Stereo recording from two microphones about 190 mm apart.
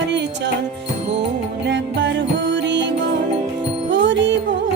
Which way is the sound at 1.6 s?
65° right (ahead or behind).